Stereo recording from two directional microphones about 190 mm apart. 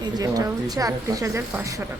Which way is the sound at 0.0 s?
20° right (ahead or behind).